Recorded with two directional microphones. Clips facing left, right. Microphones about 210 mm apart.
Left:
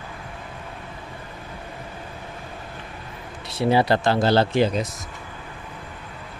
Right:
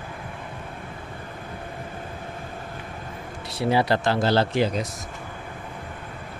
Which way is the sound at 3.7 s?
30° left (ahead or behind).